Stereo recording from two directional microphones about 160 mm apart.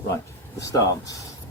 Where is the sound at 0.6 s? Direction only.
20° left (ahead or behind).